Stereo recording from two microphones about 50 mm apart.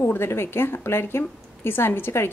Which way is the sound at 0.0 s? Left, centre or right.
Left.